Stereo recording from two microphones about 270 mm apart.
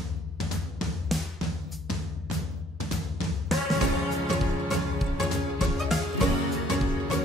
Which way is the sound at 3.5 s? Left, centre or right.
Centre.